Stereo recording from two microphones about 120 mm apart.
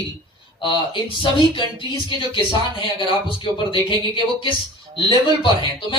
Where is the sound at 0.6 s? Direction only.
40° left (ahead or behind).